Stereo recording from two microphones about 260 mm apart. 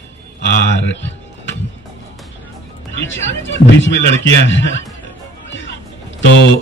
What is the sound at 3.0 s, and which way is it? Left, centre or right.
Speech, left.